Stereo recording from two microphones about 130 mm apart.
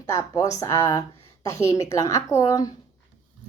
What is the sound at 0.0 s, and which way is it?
A woman's voice, 25° left (ahead or behind).